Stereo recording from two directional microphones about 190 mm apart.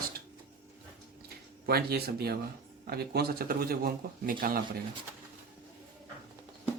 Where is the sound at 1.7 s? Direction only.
55° right (ahead or behind).